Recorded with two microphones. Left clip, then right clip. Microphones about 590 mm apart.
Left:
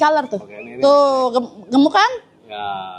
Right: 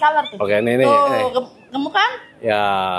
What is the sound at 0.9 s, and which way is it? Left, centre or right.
Speech, left.